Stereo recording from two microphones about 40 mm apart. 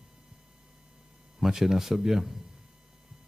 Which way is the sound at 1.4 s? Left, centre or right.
Centre.